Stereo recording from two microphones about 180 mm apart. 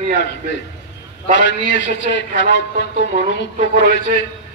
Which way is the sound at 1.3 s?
80° left.